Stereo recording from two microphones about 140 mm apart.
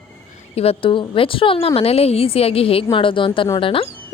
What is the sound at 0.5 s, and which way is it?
A woman's voice, 45° left (ahead or behind).